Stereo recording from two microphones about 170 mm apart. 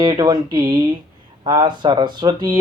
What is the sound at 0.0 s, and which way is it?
Speech, 25° right (ahead or behind).